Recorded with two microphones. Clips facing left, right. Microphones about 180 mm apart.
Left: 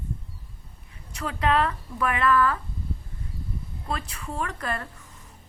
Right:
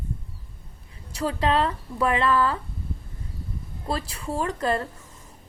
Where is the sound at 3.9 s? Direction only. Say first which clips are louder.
Right 4 dB; 30° right (ahead or behind).